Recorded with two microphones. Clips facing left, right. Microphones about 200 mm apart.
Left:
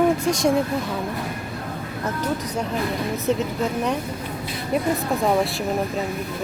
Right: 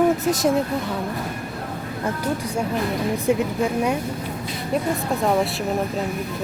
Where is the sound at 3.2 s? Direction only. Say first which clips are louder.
Right 2 dB; 10° right (ahead or behind).